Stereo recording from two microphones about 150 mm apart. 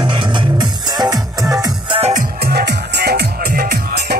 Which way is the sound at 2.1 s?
75° right (ahead or behind).